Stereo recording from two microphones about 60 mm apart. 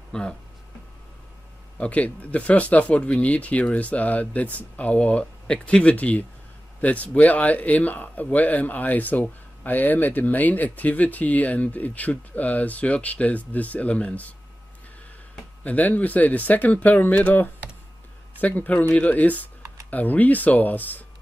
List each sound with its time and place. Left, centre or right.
0.1 s speech: centre
1.8 s speech: left
15.6 s speech: left